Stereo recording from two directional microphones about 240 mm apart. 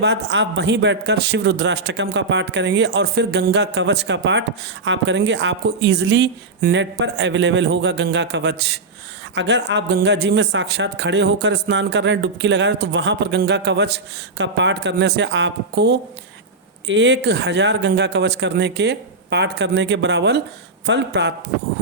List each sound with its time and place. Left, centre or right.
0.0 s a man's voice: right